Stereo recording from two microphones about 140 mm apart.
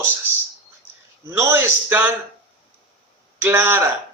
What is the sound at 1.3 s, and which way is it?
Speech, 20° right (ahead or behind).